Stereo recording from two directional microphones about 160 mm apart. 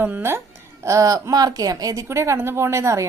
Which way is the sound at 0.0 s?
15° right (ahead or behind).